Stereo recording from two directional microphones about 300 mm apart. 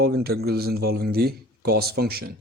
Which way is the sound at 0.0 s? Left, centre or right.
Right.